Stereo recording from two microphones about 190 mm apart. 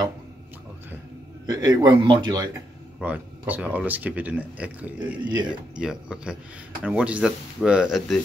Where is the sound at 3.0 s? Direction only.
10° right (ahead or behind).